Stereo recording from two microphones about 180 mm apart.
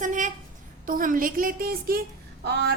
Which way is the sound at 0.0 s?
45° right (ahead or behind).